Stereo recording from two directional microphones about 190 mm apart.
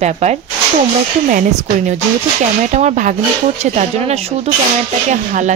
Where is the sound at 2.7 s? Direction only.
35° right (ahead or behind).